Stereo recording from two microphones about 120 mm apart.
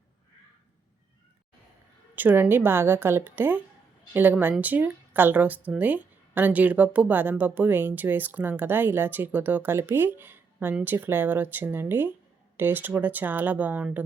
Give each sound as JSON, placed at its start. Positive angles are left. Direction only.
{"t": 2.1, "sound": "speech", "side_deg": -15}